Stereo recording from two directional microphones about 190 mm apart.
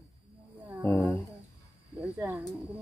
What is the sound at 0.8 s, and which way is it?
Roaring cats, 10° left (ahead or behind).